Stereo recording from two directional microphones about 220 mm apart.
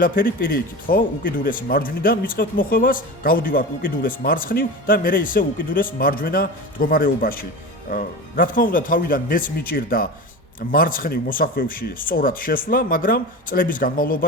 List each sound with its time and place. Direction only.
0.0 s speech: 40° left (ahead or behind)